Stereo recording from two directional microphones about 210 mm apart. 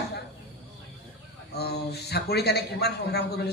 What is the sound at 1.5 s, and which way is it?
A man's voice, 50° left (ahead or behind).